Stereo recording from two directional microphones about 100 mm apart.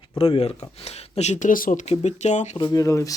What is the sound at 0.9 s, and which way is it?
Speech, 90° left.